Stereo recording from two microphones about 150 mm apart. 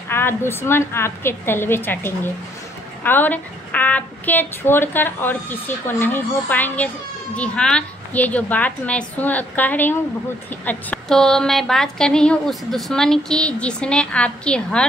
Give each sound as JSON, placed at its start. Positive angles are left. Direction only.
{"t": 0.1, "sound": "a woman's voice", "side_deg": 15}